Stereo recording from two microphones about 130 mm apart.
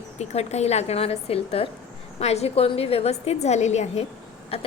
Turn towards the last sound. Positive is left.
turn(degrees=50)  # may be behind; listen again after turning